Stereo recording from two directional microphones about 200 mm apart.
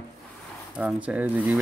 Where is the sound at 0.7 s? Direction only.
5° right (ahead or behind).